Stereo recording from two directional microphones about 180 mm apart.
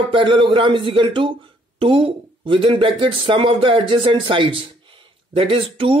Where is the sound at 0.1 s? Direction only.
25° right (ahead or behind).